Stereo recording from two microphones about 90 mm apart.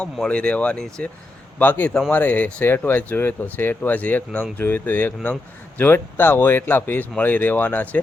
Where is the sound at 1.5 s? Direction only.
20° left (ahead or behind).